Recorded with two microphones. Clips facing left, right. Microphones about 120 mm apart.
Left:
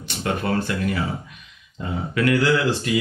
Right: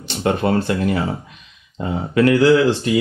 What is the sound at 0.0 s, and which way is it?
Speech, 30° right (ahead or behind).